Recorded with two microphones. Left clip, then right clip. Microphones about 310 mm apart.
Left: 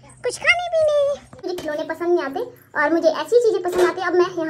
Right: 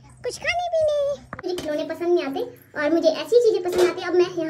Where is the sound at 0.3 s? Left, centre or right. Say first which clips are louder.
Left 5 dB; centre.